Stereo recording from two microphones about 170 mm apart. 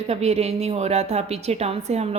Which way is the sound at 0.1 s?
40° right (ahead or behind).